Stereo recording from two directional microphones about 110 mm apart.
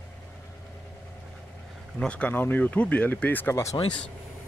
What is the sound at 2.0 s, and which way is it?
Speech, 10° left (ahead or behind).